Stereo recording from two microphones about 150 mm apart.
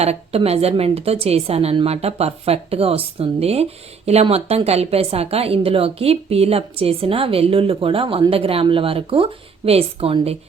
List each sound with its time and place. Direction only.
0.0 s a woman's voice: 45° right (ahead or behind)